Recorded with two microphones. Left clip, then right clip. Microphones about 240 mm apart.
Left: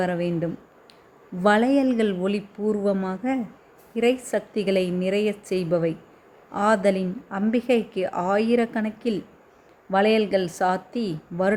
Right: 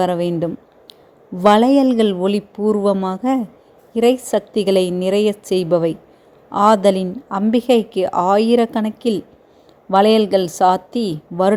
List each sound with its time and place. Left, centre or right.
0.0 s a woman's voice: right